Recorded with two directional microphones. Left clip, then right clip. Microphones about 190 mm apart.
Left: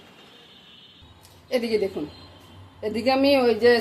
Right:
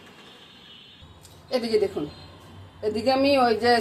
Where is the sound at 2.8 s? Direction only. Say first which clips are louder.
Left 1 dB; 25° left (ahead or behind).